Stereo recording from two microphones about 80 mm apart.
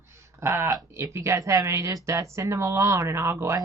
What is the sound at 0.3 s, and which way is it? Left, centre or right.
Speech, right.